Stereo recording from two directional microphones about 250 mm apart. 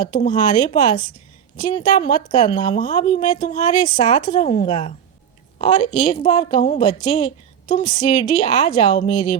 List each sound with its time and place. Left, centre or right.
0.3 s a woman's voice: centre